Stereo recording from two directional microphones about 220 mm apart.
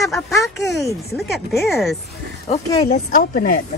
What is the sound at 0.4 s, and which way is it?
Speech, centre (ahead or behind).